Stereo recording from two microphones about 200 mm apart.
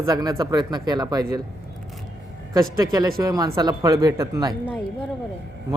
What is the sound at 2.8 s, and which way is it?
A man's voice, 20° right (ahead or behind).